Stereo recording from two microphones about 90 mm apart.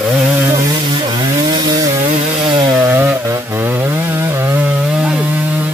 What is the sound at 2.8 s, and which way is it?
Chainsaw, 25° right (ahead or behind).